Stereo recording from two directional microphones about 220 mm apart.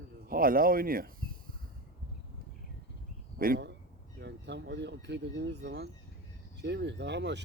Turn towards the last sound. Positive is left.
turn(degrees=-50)  # may be behind; listen again after turning